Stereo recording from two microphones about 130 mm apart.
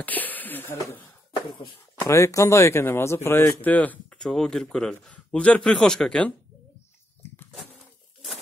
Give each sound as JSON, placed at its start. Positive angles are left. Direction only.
{"t": 0.0, "sound": "speech", "side_deg": 10}
{"t": 2.0, "sound": "speech", "side_deg": 25}